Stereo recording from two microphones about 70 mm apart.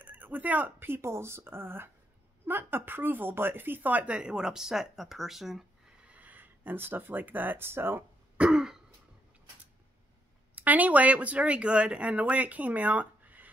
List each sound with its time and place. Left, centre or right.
0.0 s speech: right; by 5.7 s centre
6.0 s speech: right
8.5 s throat clearing: centre
10.5 s speech: right